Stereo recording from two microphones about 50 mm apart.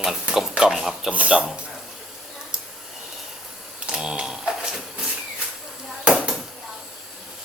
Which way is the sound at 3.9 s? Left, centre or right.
Centre.